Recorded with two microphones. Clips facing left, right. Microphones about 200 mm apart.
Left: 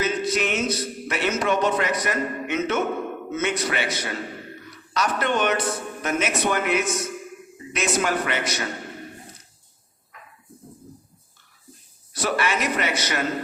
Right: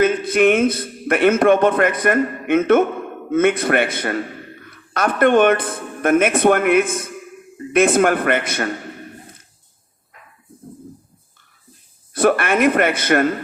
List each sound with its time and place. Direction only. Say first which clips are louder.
0.0 s a woman's voice: right 9 dB; 55° right (ahead or behind)
12.1 s speech: right 8 dB; 55° right (ahead or behind)